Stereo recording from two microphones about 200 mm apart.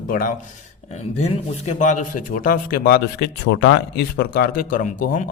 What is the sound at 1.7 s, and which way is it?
A man's voice, 40° left (ahead or behind).